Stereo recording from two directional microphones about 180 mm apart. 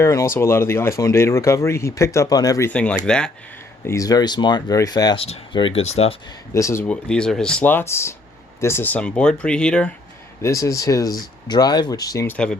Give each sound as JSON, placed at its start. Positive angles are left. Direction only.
{"t": 0.0, "sound": "speech", "side_deg": 15}
{"t": 3.8, "sound": "speech", "side_deg": 20}
{"t": 6.5, "sound": "speech", "side_deg": 15}
{"t": 10.4, "sound": "speech", "side_deg": 15}